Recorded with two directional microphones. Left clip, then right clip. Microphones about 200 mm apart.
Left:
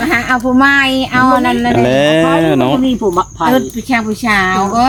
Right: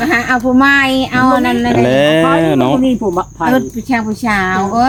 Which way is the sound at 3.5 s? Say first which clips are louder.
Left 1 dB; 5° left (ahead or behind).